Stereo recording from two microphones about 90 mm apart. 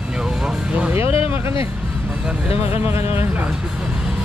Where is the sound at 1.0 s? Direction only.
90° left.